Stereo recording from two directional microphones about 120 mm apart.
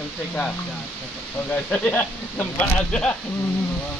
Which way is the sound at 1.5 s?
10° left (ahead or behind).